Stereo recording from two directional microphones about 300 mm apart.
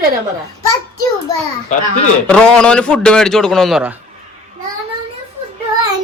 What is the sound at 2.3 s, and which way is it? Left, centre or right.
A man's voice, centre.